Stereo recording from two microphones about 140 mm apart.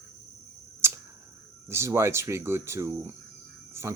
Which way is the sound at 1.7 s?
20° right (ahead or behind).